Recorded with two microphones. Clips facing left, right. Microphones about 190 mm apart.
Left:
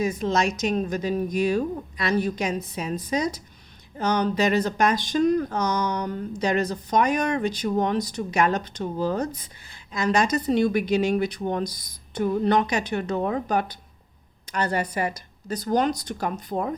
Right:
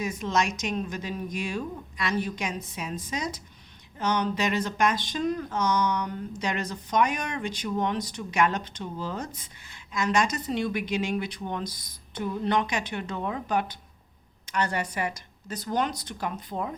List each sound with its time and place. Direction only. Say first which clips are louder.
0.0 s speech: left 4 dB; 35° left (ahead or behind)